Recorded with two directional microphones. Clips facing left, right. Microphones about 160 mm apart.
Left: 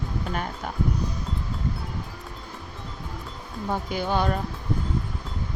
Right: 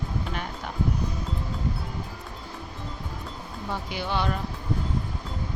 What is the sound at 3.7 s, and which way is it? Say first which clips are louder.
Speech: left 4 dB; 45° left (ahead or behind).